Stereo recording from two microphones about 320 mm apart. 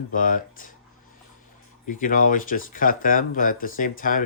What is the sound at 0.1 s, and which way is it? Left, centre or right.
Speech, left.